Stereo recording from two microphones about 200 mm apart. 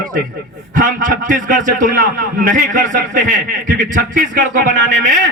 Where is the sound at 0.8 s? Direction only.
40° right (ahead or behind).